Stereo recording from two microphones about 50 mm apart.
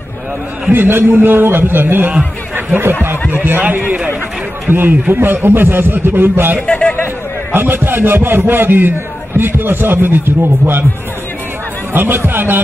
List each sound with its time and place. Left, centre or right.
0.7 s a man's voice: right
3.3 s speech: right
4.6 s a man's voice: right
11.9 s a man's voice: right